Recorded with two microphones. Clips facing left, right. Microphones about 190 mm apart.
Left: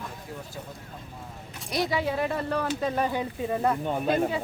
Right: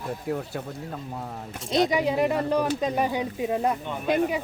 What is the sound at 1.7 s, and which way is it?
A woman's voice, 20° right (ahead or behind).